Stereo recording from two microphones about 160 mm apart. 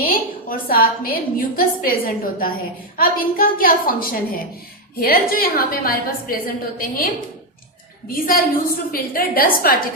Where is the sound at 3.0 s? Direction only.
65° left (ahead or behind).